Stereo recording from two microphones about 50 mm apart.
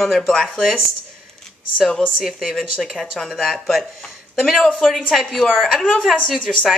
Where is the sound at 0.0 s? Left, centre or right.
Centre.